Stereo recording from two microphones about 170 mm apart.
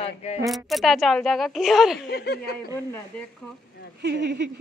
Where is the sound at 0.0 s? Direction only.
40° left (ahead or behind).